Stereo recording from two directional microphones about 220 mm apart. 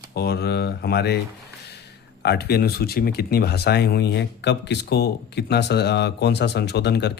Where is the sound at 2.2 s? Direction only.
50° left (ahead or behind).